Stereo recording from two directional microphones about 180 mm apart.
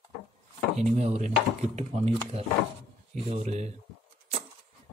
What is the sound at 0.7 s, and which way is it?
Speech, 35° right (ahead or behind).